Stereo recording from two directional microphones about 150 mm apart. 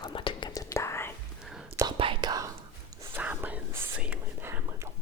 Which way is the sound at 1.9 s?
35° right (ahead or behind).